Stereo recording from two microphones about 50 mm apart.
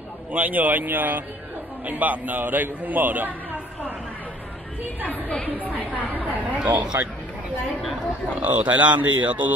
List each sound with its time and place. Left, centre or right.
0.3 s a man's voice: right
5.0 s chatter: left
5.8 s chatter: right
6.6 s speech: right
8.4 s a man's voice: right